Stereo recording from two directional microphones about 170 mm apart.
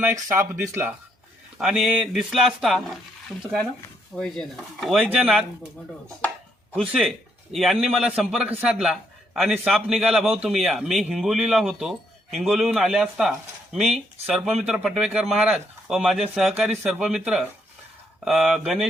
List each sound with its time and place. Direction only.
0.0 s a man's voice: 15° right (ahead or behind)
6.7 s a man's voice: centre (ahead or behind)